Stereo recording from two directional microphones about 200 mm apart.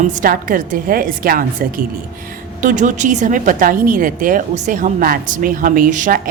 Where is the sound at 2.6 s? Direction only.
40° right (ahead or behind).